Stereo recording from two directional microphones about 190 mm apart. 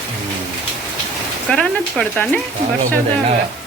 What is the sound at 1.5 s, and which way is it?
Speech, 5° left (ahead or behind).